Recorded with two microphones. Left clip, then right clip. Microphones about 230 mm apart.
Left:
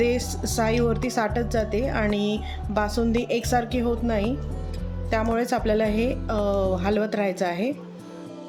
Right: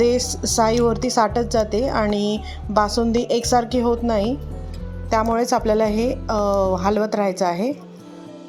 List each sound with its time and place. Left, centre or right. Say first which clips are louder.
0.0 s a woman's voice: right 5 dB; centre